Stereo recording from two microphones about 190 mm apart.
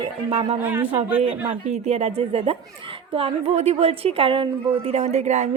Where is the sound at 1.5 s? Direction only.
35° right (ahead or behind).